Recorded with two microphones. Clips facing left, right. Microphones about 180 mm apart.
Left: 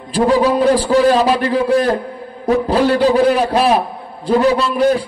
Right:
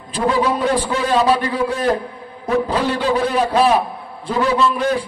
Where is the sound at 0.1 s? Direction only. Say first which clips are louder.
Left 5 dB; 35° left (ahead or behind).